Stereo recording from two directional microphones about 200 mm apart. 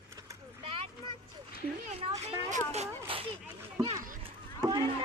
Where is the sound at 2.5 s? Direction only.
35° right (ahead or behind).